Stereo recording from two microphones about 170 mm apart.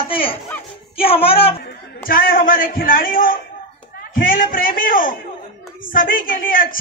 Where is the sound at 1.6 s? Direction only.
60° left (ahead or behind).